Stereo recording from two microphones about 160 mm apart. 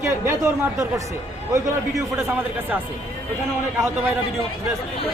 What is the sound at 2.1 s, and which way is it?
Speech, 15° right (ahead or behind).